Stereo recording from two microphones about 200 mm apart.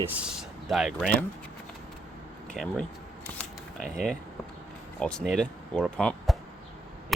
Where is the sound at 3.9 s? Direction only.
5° left (ahead or behind).